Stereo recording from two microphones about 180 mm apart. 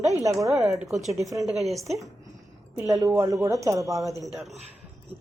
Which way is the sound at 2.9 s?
15° right (ahead or behind).